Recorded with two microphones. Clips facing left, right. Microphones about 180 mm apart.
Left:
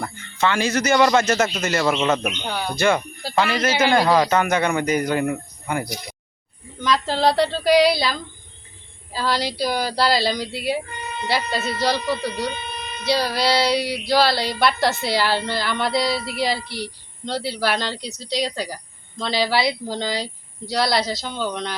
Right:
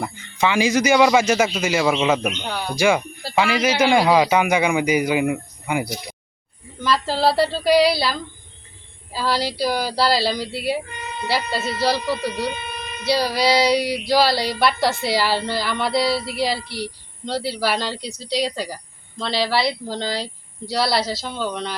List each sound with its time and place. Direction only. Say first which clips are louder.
0.0 s speech: right 1 dB; 10° right (ahead or behind)